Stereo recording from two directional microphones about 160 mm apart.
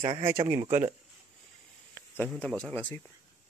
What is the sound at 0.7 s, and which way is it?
Speech, 45° right (ahead or behind).